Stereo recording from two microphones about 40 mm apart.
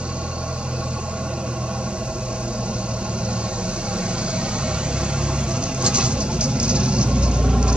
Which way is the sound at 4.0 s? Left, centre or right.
Right.